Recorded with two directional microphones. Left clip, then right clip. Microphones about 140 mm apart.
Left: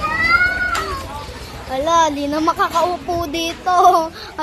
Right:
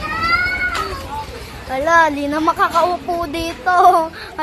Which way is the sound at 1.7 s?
5° left (ahead or behind).